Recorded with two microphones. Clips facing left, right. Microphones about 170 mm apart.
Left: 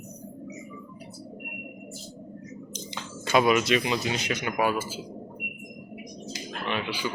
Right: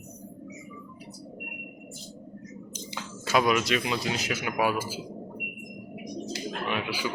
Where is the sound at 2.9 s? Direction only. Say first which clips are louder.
Left 2 dB; 5° right (ahead or behind).